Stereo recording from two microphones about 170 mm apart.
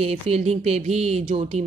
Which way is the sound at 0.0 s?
40° right (ahead or behind).